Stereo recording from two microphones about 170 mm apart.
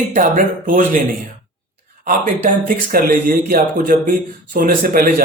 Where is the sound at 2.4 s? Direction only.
50° right (ahead or behind).